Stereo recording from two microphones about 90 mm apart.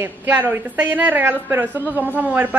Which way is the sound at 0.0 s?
25° right (ahead or behind).